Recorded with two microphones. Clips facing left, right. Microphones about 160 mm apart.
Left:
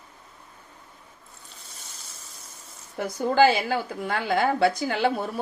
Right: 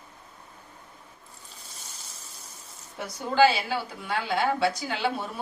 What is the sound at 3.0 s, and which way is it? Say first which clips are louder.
A woman's voice: left 2 dB; 50° left (ahead or behind).